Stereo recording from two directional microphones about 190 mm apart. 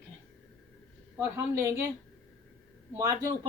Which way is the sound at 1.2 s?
15° right (ahead or behind).